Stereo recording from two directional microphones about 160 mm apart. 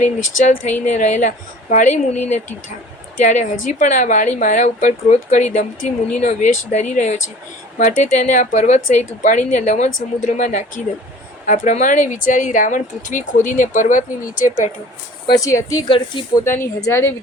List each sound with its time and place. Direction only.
0.0 s speech: 50° left (ahead or behind)
15.4 s speech: 20° left (ahead or behind)
16.4 s a woman's voice: 15° left (ahead or behind)